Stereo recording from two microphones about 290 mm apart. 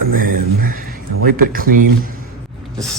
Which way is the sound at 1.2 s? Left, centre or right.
Right.